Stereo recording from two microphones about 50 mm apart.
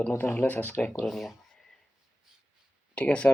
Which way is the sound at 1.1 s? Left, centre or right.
Centre.